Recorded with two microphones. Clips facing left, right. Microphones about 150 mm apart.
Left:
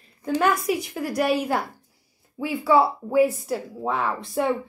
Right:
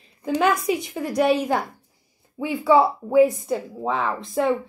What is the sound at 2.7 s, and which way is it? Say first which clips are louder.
Speech: right 2 dB; 20° right (ahead or behind).